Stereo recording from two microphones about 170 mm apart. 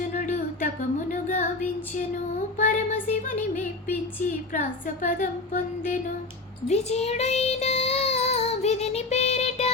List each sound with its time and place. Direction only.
0.0 s music: 50° left (ahead or behind)
2.6 s child singing: 50° left (ahead or behind)
5.0 s a sound: 50° left (ahead or behind)
6.7 s child singing: 40° left (ahead or behind)